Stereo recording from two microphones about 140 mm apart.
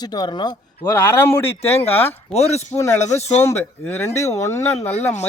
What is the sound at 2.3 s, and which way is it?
Speech, 50° left (ahead or behind).